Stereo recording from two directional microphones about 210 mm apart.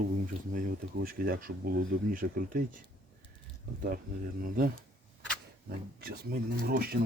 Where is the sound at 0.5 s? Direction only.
45° right (ahead or behind).